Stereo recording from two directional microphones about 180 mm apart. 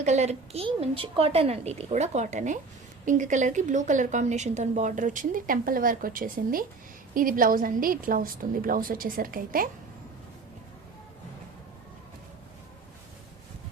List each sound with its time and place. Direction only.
0.0 s a woman's voice: 40° right (ahead or behind)